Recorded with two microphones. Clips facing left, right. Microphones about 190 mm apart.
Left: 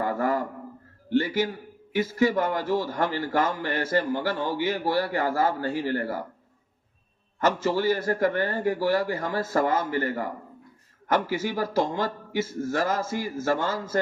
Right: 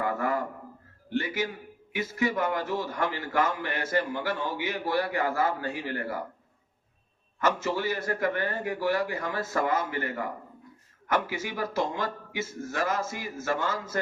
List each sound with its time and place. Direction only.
0.0 s a sound: 35° left (ahead or behind)
2.1 s a man's voice: 35° left (ahead or behind)
7.3 s a man's voice: 35° left (ahead or behind)
11.3 s a man's voice: 35° left (ahead or behind)